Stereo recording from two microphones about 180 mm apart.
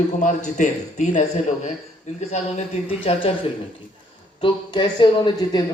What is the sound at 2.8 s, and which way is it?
Speech, 30° left (ahead or behind).